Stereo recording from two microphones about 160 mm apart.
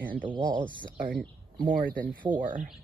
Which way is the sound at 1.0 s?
60° right (ahead or behind).